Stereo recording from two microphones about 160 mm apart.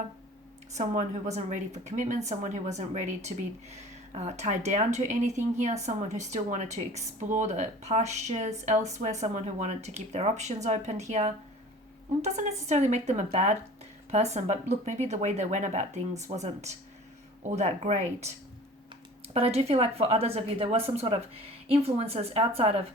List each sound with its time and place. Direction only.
0.8 s a woman's voice: 45° right (ahead or behind)
19.3 s a woman's voice: 40° right (ahead or behind)